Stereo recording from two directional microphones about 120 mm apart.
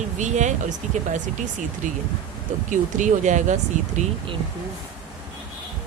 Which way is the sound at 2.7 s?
90° right.